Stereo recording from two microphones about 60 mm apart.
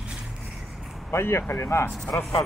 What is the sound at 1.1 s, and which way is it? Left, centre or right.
Speech, left.